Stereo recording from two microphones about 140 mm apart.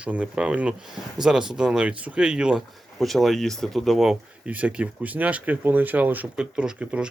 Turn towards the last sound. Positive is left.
turn(degrees=-5)  # may be behind; listen again after turning